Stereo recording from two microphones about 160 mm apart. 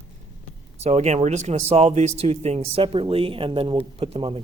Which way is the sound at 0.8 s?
45° right (ahead or behind).